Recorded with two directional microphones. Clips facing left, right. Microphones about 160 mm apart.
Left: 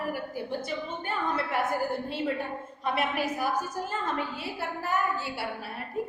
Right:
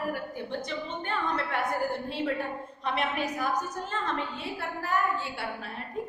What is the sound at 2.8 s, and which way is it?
A woman's voice, 5° left (ahead or behind).